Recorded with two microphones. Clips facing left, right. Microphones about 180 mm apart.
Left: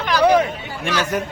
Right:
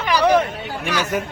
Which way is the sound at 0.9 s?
10° right (ahead or behind).